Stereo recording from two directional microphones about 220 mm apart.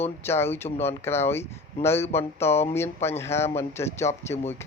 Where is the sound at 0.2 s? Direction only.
10° left (ahead or behind).